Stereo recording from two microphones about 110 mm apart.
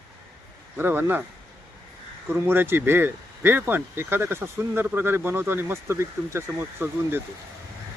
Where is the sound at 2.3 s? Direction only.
20° right (ahead or behind).